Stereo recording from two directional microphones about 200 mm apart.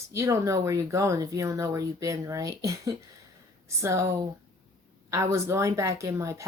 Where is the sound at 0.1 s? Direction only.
15° right (ahead or behind).